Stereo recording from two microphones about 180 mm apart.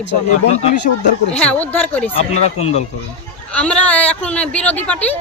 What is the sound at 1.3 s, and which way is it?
Speech, 5° left (ahead or behind).